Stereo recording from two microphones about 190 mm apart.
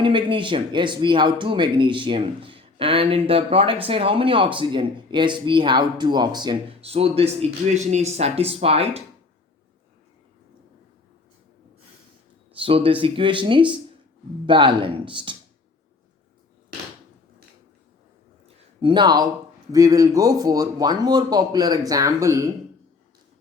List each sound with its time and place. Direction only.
0.0 s speech: 25° right (ahead or behind)
12.5 s speech: 30° right (ahead or behind)
18.4 s a sound: 25° right (ahead or behind)
19.7 s speech: 15° right (ahead or behind)